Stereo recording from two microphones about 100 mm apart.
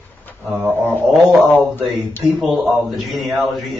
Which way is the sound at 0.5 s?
20° right (ahead or behind).